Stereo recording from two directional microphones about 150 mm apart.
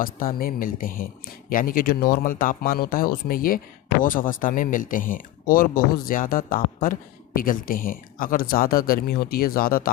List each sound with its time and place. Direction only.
0.0 s speech: 75° left (ahead or behind)